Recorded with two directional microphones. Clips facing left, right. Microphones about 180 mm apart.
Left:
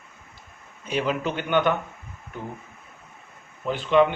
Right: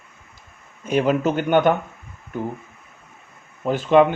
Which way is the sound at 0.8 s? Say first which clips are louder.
Right 7 dB; 50° right (ahead or behind).